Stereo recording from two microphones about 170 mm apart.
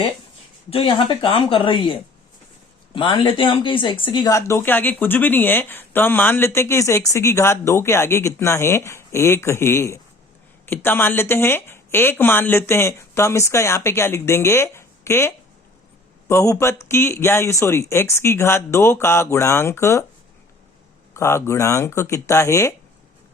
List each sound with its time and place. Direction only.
0.7 s a woman's voice: 30° left (ahead or behind); by 15.3 s 15° left (ahead or behind)
16.3 s speech: 15° left (ahead or behind)
21.1 s speech: 15° left (ahead or behind)